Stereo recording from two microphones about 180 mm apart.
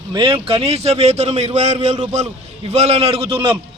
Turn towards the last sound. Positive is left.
turn(degrees=-30)  # may be behind; listen again after turning